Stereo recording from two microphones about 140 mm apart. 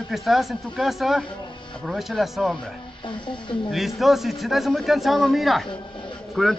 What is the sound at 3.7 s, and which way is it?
A man's voice, centre (ahead or behind).